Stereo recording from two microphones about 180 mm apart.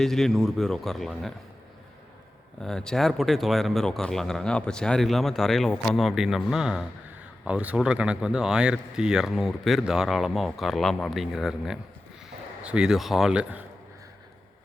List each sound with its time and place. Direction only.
0.0 s speech: centre (ahead or behind)
2.6 s speech: 5° left (ahead or behind)